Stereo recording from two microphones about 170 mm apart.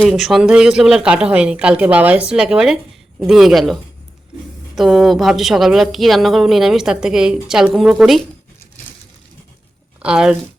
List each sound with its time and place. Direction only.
0.0 s speech: centre (ahead or behind)
10.0 s speech: 5° right (ahead or behind)